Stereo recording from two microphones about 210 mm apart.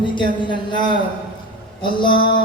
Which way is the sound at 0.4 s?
20° left (ahead or behind).